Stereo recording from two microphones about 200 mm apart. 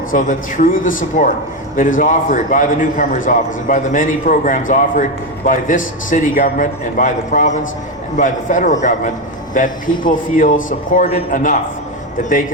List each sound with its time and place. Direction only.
0.1 s a man's voice: 40° left (ahead or behind)